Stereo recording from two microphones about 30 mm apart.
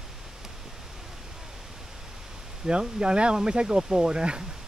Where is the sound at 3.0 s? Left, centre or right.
Right.